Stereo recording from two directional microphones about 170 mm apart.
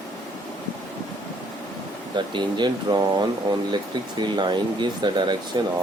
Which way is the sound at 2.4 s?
25° right (ahead or behind).